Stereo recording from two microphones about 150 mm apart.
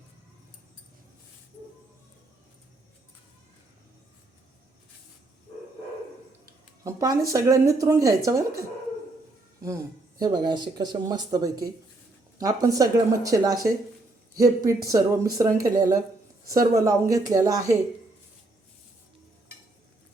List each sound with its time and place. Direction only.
6.8 s a sound: 25° right (ahead or behind)
7.3 s speech: 20° right (ahead or behind)
9.6 s speech: 25° right (ahead or behind)